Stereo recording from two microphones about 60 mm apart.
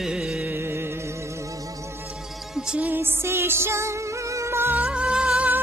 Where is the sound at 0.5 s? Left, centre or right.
Right.